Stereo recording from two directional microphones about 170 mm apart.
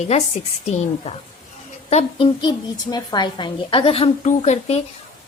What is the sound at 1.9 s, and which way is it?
Speech, 35° left (ahead or behind).